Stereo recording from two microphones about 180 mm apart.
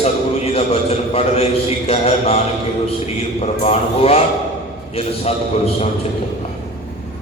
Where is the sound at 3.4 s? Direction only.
35° left (ahead or behind).